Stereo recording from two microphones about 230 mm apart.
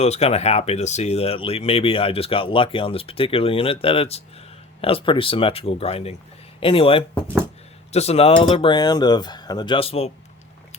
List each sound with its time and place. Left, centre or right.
0.0 s speech: left